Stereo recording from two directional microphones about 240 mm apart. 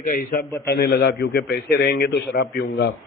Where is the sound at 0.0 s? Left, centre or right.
Left.